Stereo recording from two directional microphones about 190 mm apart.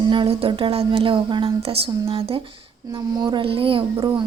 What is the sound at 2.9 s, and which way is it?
Speech, 20° right (ahead or behind).